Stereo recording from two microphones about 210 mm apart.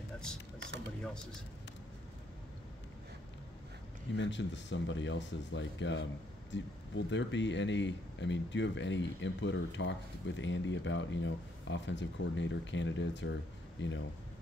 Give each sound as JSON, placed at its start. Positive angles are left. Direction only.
{"t": 4.2, "sound": "speech", "side_deg": 60}